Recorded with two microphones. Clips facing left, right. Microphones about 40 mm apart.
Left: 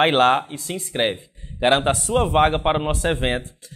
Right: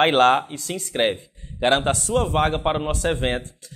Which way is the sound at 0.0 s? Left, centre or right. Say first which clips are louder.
Even; centre.